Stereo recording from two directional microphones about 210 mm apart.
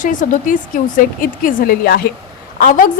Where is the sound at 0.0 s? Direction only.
40° left (ahead or behind).